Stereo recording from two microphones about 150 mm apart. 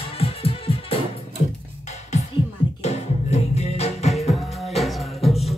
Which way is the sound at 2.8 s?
45° left (ahead or behind).